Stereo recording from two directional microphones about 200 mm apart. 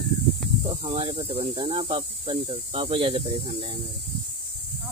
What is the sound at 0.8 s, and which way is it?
Speech, 25° right (ahead or behind).